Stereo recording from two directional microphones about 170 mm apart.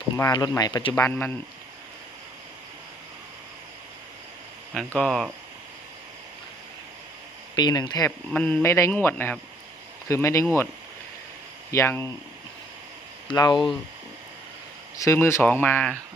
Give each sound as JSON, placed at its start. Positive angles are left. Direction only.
{"t": 0.2, "sound": "speech", "side_deg": 20}
{"t": 0.9, "sound": "speech", "side_deg": 15}
{"t": 4.9, "sound": "speech", "side_deg": 0}
{"t": 7.5, "sound": "speech", "side_deg": 25}
{"t": 8.3, "sound": "speech", "side_deg": 5}
{"t": 11.7, "sound": "speech", "side_deg": 15}
{"t": 13.2, "sound": "speech", "side_deg": 25}
{"t": 14.9, "sound": "speech", "side_deg": 15}